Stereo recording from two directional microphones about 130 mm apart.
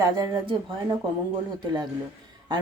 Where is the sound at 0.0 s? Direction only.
35° right (ahead or behind).